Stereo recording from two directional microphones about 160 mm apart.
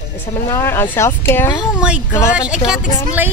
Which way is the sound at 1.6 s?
5° right (ahead or behind).